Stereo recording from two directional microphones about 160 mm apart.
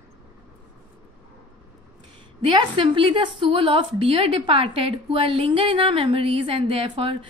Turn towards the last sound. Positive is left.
turn(degrees=-35)  # may be behind; listen again after turning